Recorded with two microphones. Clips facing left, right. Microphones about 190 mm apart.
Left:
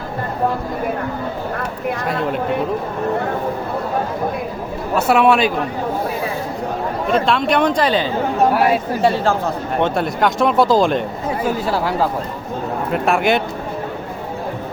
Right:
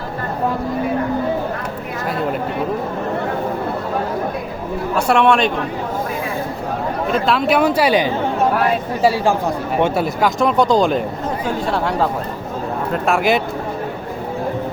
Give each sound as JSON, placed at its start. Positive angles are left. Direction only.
{"t": 4.9, "sound": "speech", "side_deg": 5}
{"t": 7.1, "sound": "speech", "side_deg": 0}